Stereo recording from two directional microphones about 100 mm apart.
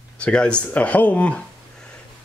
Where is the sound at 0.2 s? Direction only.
10° left (ahead or behind).